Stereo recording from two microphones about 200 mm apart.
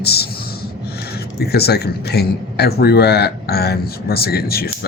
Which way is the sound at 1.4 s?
55° left (ahead or behind).